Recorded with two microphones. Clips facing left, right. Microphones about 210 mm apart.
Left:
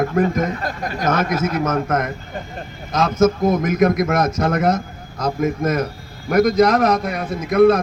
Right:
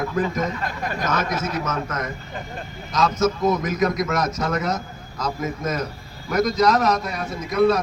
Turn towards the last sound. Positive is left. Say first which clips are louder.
# left 5 dB
turn(degrees=55)  # may be behind; listen again after turning